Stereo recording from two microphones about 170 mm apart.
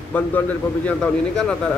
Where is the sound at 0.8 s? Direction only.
5° left (ahead or behind).